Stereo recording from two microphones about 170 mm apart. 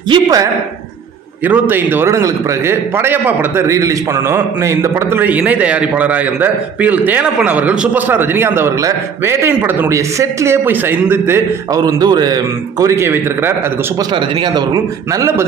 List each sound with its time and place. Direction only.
0.1 s a man's voice: 20° right (ahead or behind)
14.1 s a man's voice: 25° right (ahead or behind)